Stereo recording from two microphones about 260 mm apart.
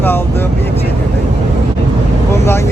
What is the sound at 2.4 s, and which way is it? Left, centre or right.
Speech, centre.